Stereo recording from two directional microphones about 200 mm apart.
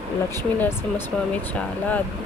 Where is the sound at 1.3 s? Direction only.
5° left (ahead or behind).